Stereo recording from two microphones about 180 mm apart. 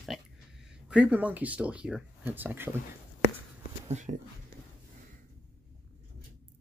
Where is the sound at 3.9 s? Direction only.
40° right (ahead or behind).